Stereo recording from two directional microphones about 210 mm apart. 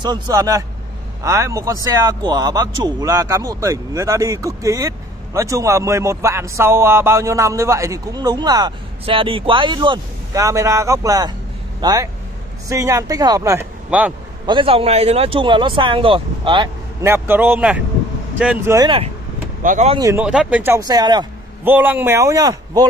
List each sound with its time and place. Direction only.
0.0 s a man's voice: 20° right (ahead or behind)
14.4 s speech: 25° right (ahead or behind)
17.0 s speech: 10° right (ahead or behind)
19.6 s speech: 40° right (ahead or behind)
19.9 s speech: 15° right (ahead or behind)
20.2 s speech: 5° right (ahead or behind)
21.6 s speech: 10° right (ahead or behind)